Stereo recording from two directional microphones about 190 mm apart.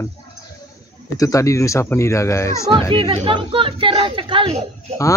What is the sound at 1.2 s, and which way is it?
Speech, 15° left (ahead or behind).